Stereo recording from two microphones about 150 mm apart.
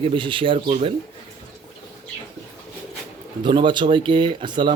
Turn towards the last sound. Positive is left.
turn(degrees=-30)  # may be behind; listen again after turning